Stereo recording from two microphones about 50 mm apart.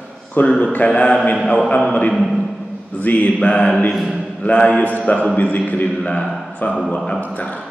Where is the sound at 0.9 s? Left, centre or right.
Centre.